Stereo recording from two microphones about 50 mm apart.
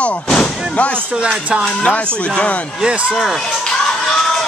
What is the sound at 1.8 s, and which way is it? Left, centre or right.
Speech, left.